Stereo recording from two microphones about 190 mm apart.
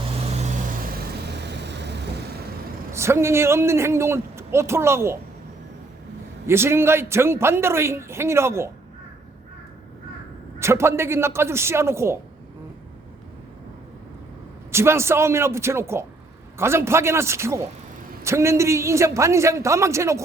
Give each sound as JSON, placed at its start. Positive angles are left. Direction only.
{"t": 1.3, "sound": "vehicle", "side_deg": -65}
{"t": 2.9, "sound": "a man's voice", "side_deg": -15}
{"t": 6.5, "sound": "a man's voice", "side_deg": -15}
{"t": 10.6, "sound": "a man's voice", "side_deg": -15}
{"t": 14.7, "sound": "a man's voice", "side_deg": -15}